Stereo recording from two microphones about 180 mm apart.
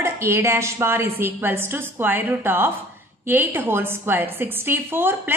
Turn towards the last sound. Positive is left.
turn(degrees=-10)  # may be behind; listen again after turning